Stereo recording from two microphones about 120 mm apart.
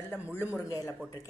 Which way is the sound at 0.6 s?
25° left (ahead or behind).